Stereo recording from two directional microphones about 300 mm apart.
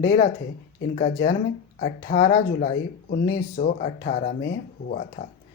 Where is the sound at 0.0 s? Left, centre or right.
Left.